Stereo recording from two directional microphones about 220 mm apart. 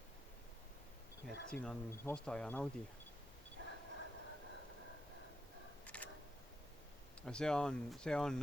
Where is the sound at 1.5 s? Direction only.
5° left (ahead or behind).